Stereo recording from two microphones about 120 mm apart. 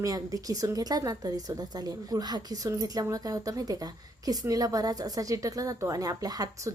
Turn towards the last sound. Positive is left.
turn(degrees=-30)  # may be behind; listen again after turning